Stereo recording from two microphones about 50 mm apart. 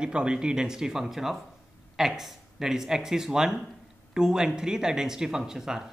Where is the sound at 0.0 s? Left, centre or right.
Centre.